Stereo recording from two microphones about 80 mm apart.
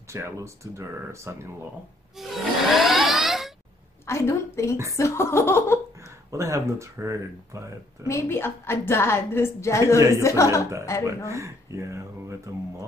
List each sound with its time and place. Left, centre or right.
0.1 s speech: right
2.1 s a sound: centre
4.0 s a sound: left
4.9 s a woman's voice: left
6.3 s speech: right
8.1 s a woman's voice: left
11.2 s speech: right